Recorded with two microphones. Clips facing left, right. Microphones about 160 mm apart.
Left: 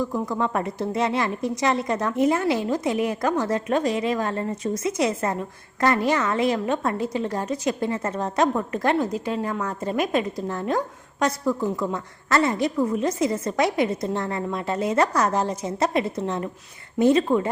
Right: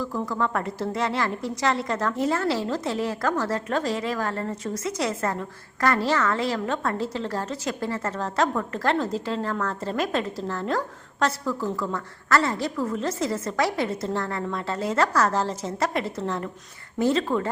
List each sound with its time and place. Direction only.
0.0 s a woman's voice: 20° left (ahead or behind)